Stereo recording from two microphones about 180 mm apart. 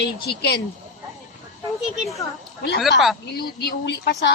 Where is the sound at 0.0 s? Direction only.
70° left (ahead or behind).